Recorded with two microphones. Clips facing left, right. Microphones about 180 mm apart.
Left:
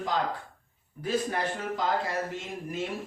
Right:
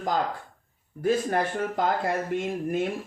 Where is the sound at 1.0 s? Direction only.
50° right (ahead or behind).